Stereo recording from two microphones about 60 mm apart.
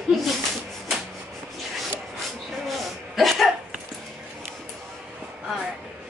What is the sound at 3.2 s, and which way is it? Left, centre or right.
Speech, centre.